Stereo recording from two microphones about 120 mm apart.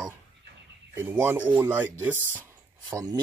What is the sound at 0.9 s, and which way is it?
Speech, 15° right (ahead or behind).